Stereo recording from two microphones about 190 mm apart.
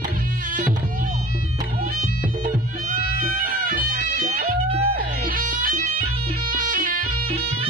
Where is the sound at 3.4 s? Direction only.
45° right (ahead or behind).